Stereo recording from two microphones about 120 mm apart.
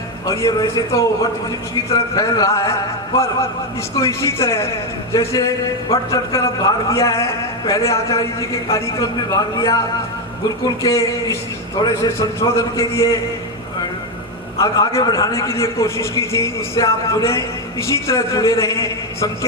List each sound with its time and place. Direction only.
0.3 s a man's voice: 30° left (ahead or behind)
3.9 s a man's voice: 25° left (ahead or behind)
10.8 s a man's voice: 25° left (ahead or behind)
14.6 s a man's voice: 25° left (ahead or behind)